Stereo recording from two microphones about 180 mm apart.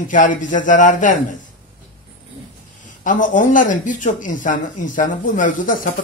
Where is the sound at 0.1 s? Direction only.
45° left (ahead or behind).